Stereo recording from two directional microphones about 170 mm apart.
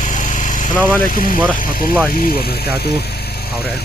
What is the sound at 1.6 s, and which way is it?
Speech, 55° left (ahead or behind).